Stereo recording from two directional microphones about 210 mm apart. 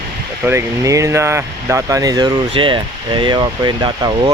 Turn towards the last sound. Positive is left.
turn(degrees=-20)  # may be behind; listen again after turning